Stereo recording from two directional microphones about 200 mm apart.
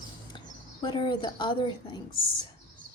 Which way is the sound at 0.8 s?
20° left (ahead or behind).